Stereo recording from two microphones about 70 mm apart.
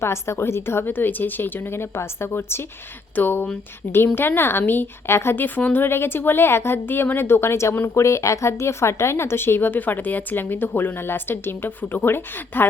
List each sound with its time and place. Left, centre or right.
0.0 s speech: left
5.5 s speech: left